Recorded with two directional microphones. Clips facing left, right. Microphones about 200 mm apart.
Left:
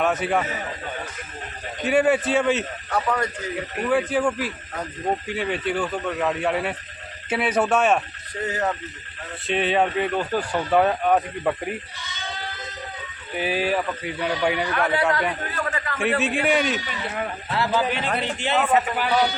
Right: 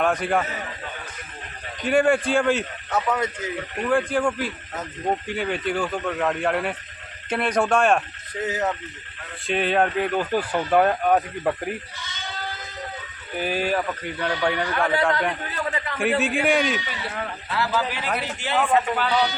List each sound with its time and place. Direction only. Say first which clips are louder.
0.0 s speech: even; 5° left (ahead or behind)
1.8 s speech: even; 5° left (ahead or behind)
3.8 s speech: even; 5° left (ahead or behind)
13.3 s speech: left 1 dB; centre (ahead or behind)
17.2 s a man's voice: left 2 dB; 25° left (ahead or behind)